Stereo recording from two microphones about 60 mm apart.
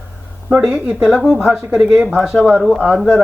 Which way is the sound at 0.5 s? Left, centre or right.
Centre.